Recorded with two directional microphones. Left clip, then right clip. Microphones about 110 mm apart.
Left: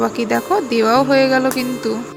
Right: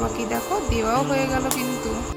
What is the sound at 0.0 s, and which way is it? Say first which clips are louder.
Speech: left 7 dB; 50° left (ahead or behind).